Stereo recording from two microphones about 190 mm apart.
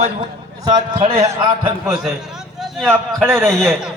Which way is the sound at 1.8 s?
10° right (ahead or behind).